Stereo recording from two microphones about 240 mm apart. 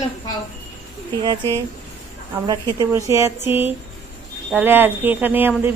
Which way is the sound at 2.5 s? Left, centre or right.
Centre.